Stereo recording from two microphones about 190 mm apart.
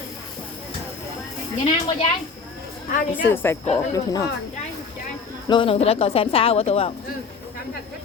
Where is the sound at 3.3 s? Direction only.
10° left (ahead or behind).